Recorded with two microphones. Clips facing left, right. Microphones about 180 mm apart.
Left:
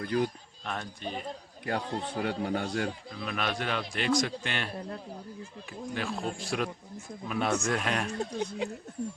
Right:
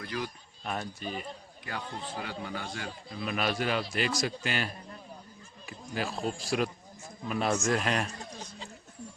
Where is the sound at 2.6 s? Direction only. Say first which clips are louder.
Left 8 dB; 65° left (ahead or behind).